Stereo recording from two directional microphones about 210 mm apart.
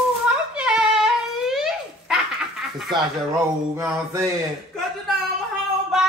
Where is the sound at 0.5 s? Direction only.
5° right (ahead or behind).